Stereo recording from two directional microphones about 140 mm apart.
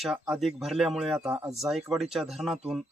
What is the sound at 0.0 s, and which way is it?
Speech, centre (ahead or behind).